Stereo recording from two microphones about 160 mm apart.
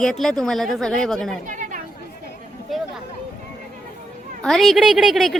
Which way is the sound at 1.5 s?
55° right (ahead or behind).